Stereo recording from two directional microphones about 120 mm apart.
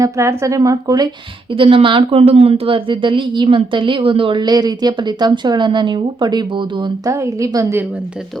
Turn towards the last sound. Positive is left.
turn(degrees=-25)  # may be behind; listen again after turning